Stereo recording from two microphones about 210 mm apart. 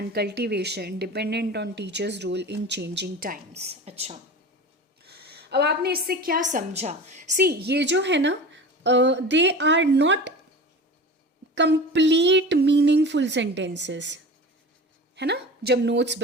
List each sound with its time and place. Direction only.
0.1 s speech: 50° right (ahead or behind)
3.6 s a woman's voice: 30° right (ahead or behind)
5.0 s a woman's voice: 50° right (ahead or behind)
11.5 s a woman's voice: 55° right (ahead or behind)